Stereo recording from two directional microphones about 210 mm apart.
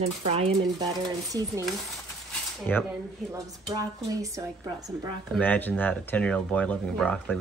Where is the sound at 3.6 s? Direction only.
15° right (ahead or behind).